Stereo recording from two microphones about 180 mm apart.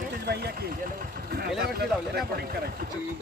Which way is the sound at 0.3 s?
60° right (ahead or behind).